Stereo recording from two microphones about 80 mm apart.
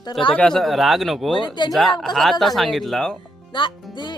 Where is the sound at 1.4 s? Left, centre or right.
Left.